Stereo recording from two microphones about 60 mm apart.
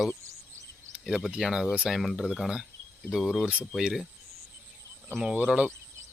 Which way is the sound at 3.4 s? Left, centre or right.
Centre.